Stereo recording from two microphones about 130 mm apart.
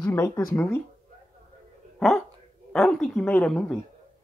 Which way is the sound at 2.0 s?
5° left (ahead or behind).